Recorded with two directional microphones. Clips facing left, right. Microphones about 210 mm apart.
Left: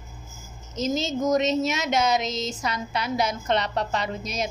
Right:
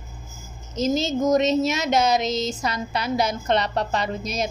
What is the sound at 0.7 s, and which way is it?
A woman's voice, 35° right (ahead or behind).